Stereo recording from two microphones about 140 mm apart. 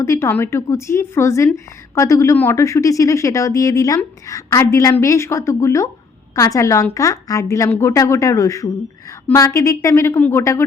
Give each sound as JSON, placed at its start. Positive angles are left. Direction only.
{"t": 0.0, "sound": "speech", "side_deg": 20}